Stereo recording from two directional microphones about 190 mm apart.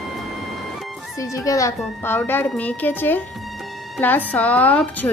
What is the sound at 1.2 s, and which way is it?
Speech, 15° left (ahead or behind).